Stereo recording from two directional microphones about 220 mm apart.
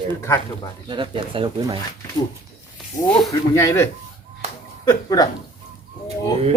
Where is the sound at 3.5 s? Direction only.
15° left (ahead or behind).